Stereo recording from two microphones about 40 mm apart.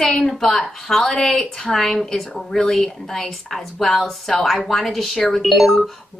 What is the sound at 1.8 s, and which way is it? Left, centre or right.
A woman's voice, centre.